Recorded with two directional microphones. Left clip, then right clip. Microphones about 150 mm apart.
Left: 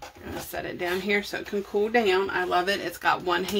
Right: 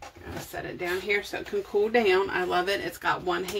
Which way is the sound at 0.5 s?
40° left (ahead or behind).